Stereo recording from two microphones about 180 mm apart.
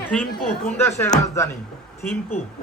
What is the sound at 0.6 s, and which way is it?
Speech, 15° left (ahead or behind).